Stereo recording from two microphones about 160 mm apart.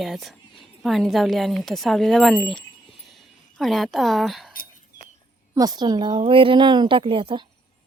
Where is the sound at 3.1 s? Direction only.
Centre (ahead or behind).